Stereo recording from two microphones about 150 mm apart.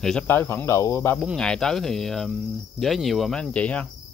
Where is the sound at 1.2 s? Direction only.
5° left (ahead or behind).